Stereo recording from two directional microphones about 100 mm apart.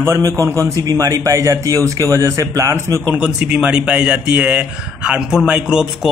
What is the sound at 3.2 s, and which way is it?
Speech, 10° right (ahead or behind).